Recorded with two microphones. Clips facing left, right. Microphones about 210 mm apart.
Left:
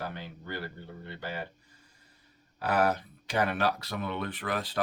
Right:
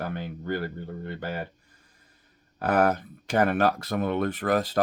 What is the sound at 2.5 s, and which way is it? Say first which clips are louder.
Speech: right 4 dB; 50° right (ahead or behind).